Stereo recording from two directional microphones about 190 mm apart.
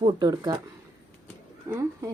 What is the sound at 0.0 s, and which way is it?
Speech, 20° right (ahead or behind).